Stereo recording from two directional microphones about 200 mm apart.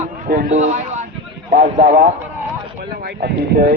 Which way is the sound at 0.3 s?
45° right (ahead or behind).